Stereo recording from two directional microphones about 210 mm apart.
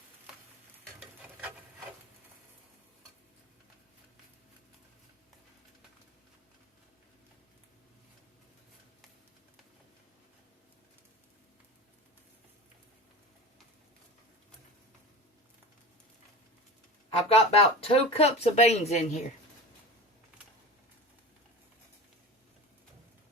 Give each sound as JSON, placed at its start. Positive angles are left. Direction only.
{"t": 17.1, "sound": "speech", "side_deg": 30}